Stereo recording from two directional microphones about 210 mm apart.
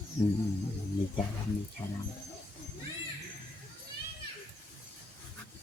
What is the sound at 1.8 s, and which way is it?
Speech, 20° left (ahead or behind).